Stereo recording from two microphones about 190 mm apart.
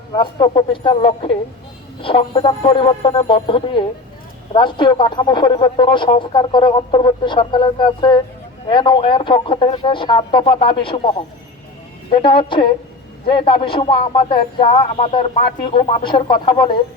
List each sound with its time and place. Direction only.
0.1 s speech: 25° left (ahead or behind)
12.1 s speech: 25° left (ahead or behind)